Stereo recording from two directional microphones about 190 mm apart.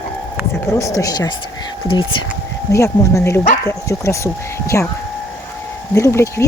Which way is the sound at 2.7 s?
15° left (ahead or behind).